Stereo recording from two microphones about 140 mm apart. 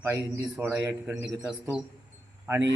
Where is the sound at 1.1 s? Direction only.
25° right (ahead or behind).